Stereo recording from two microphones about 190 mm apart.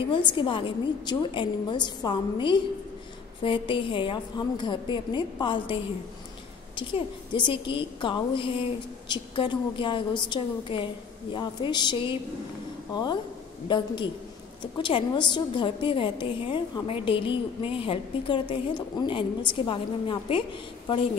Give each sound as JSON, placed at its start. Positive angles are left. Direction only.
{"t": 0.1, "sound": "a woman's voice", "side_deg": 25}